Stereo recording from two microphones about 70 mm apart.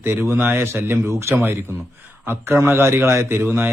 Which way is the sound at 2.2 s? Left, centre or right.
Right.